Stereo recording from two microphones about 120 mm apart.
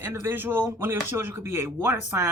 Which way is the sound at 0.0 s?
20° right (ahead or behind).